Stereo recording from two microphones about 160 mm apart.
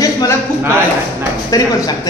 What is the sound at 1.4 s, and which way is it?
Speech, 20° left (ahead or behind).